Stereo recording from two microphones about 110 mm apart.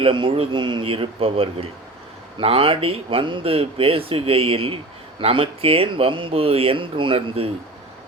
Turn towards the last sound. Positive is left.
turn(degrees=-55)  # may be behind; listen again after turning